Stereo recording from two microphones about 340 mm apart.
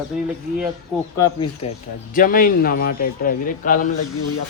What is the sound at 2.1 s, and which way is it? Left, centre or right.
A man's voice, left.